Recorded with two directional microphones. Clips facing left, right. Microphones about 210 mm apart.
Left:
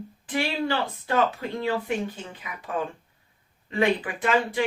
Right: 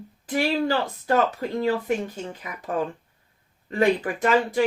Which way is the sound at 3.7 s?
45° right (ahead or behind).